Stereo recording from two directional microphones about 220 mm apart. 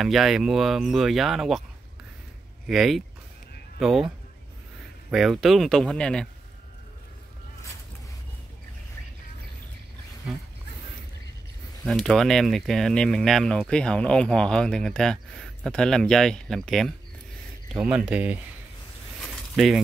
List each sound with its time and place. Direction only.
0.0 s speech: centre (ahead or behind)
2.6 s speech: centre (ahead or behind)
5.1 s speech: centre (ahead or behind)
11.8 s speech: centre (ahead or behind)
19.5 s speech: centre (ahead or behind)